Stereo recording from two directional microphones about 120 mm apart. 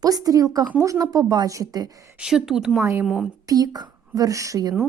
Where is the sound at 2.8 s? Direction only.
20° right (ahead or behind).